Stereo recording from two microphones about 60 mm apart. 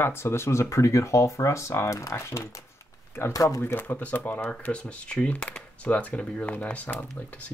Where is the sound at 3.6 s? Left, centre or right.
Left.